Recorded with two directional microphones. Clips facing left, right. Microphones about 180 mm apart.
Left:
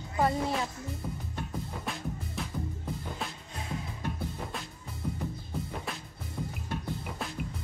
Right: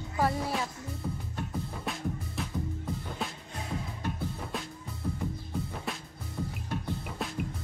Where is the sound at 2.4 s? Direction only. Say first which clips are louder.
Right 2 dB; centre (ahead or behind).